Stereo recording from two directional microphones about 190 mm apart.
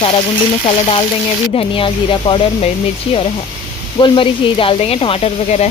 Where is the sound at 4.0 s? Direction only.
25° left (ahead or behind).